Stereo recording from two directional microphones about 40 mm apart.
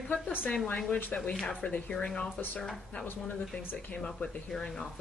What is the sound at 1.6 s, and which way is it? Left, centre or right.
Speech, left.